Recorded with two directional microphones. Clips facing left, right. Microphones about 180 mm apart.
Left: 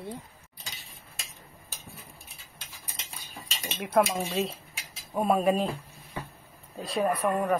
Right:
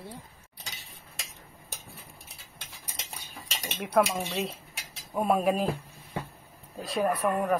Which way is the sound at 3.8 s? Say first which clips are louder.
Left 1 dB; centre (ahead or behind).